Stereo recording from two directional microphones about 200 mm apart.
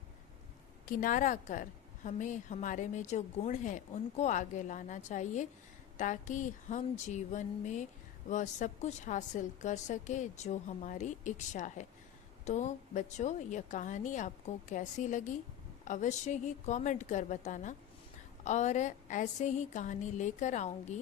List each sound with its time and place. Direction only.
0.9 s a woman's voice: 40° left (ahead or behind)